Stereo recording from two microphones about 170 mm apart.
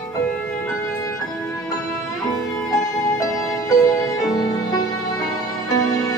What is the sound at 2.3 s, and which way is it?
Music, 20° left (ahead or behind).